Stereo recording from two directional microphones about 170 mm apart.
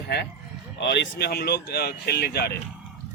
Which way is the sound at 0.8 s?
90° left.